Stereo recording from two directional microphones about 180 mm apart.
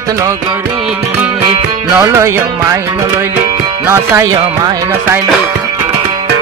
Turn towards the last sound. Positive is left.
turn(degrees=-15)  # may be behind; listen again after turning